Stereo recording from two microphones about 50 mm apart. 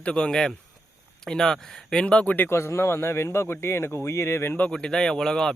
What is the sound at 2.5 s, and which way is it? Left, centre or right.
Speech, left.